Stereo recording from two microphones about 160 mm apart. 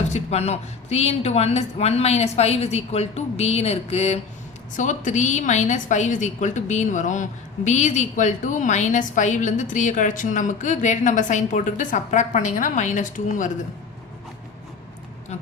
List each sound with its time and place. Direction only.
0.1 s a woman's voice: 40° left (ahead or behind)